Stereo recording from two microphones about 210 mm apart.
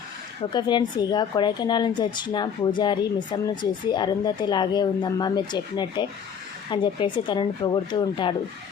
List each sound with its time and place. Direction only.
0.5 s speech: 20° left (ahead or behind)